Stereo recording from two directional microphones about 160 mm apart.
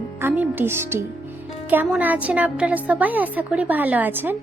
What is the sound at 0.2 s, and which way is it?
A woman's voice, 10° right (ahead or behind).